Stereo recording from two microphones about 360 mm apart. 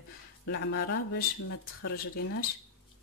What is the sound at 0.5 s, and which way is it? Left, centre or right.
Speech, left.